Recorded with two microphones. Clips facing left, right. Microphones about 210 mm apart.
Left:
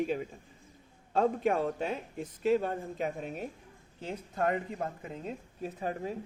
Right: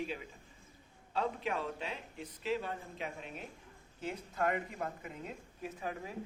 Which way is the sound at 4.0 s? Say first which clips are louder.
Left 3 dB; 30° left (ahead or behind).